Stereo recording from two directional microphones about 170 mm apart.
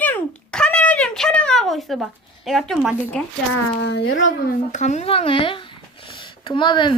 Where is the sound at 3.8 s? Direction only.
90° left.